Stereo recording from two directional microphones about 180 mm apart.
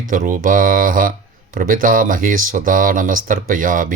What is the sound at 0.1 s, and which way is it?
Speech, 50° right (ahead or behind).